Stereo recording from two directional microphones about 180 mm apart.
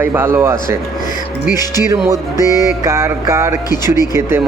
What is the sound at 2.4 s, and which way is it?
Speech, 20° left (ahead or behind).